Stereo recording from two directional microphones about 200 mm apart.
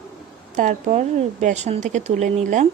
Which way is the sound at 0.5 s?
40° right (ahead or behind).